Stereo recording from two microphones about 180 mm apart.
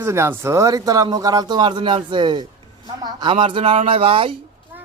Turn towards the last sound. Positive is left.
turn(degrees=-30)  # may be behind; listen again after turning